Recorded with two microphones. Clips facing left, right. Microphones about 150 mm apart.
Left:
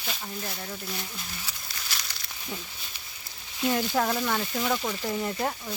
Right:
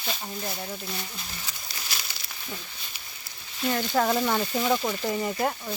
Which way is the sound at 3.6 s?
5° left (ahead or behind).